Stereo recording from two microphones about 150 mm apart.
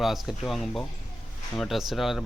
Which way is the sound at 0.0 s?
Centre (ahead or behind).